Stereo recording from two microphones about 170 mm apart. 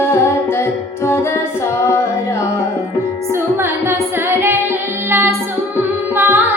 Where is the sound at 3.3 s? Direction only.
15° right (ahead or behind).